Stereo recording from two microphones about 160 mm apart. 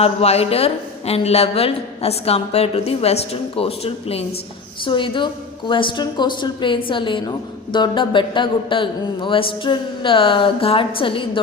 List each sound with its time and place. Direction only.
0.0 s a woman's voice: 40° left (ahead or behind)